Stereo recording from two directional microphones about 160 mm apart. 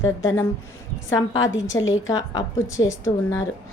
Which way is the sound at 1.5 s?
20° left (ahead or behind).